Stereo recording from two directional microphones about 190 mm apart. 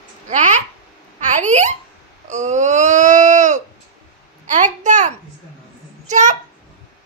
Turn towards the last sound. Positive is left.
turn(degrees=-40)  # may be behind; listen again after turning